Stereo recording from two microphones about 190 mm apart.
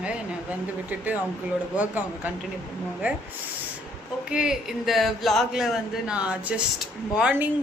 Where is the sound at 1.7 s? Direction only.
10° right (ahead or behind).